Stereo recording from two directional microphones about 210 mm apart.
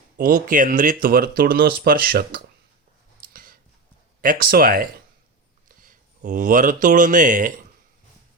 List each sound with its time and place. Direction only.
0.2 s speech: 40° right (ahead or behind)
3.2 s a sound: 40° right (ahead or behind)
4.2 s speech: 45° right (ahead or behind)